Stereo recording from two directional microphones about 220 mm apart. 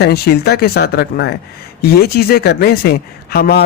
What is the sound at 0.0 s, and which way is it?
A man's voice, 45° left (ahead or behind).